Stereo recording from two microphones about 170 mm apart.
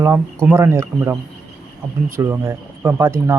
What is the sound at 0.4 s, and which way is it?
Speech, 15° right (ahead or behind).